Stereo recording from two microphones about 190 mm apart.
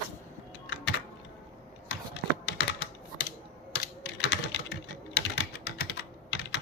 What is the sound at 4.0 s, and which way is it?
Typing, 60° left (ahead or behind).